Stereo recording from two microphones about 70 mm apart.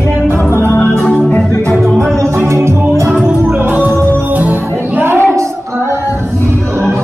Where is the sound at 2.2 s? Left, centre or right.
Right.